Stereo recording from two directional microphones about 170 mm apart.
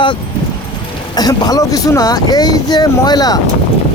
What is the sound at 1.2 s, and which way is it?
Speech, 20° left (ahead or behind).